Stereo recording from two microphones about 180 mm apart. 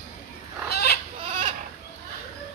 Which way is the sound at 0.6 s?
60° left (ahead or behind).